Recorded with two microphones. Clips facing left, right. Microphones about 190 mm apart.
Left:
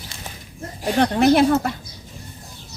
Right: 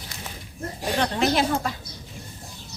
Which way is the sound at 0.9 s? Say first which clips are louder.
Left 8 dB; 55° left (ahead or behind).